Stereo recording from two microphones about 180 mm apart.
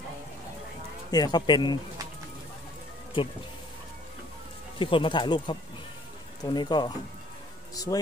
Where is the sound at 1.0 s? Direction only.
20° left (ahead or behind).